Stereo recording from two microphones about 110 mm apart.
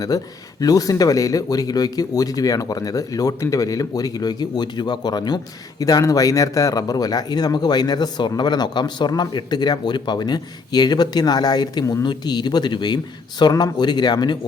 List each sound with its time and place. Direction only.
0.1 s speech: 35° left (ahead or behind)